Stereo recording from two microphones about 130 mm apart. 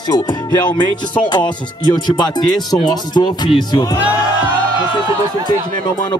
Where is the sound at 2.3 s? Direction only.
30° left (ahead or behind).